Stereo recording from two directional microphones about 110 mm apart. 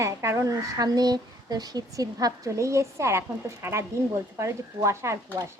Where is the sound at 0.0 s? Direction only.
25° right (ahead or behind).